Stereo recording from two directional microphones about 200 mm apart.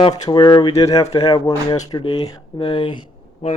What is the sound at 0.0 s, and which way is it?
Speech, 25° left (ahead or behind).